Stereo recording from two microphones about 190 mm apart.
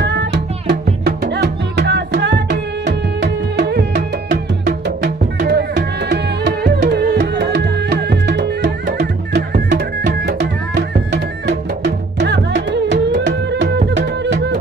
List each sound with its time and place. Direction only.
0.0 s music: 65° right (ahead or behind)